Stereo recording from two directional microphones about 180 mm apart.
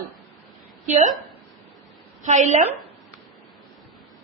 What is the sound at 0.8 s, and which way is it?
Speech, 40° right (ahead or behind).